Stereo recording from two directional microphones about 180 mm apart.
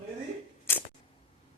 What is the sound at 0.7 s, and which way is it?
Camera, 15° left (ahead or behind).